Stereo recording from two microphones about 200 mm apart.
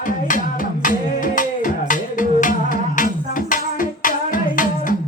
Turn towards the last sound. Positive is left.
turn(degrees=40)  # may be behind; listen again after turning